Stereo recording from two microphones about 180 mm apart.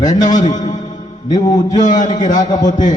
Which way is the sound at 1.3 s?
20° left (ahead or behind).